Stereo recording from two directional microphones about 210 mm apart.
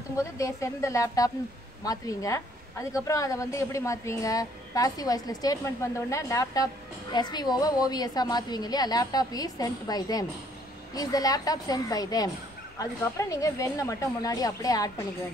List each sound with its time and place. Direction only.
0.2 s a woman's voice: 15° left (ahead or behind)